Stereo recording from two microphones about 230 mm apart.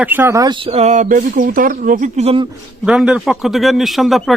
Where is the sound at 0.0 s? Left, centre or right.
Centre; by 2.5 s right.